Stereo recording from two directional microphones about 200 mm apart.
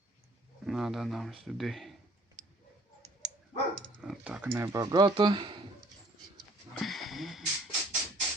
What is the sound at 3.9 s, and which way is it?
Speech, centre (ahead or behind).